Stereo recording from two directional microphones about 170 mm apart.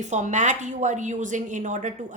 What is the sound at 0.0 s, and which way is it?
A woman's voice, 45° right (ahead or behind).